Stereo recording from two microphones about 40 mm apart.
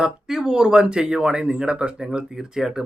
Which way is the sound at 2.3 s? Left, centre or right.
Centre.